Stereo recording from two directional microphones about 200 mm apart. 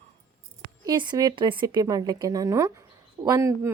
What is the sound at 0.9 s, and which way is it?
A woman's voice, 20° right (ahead or behind).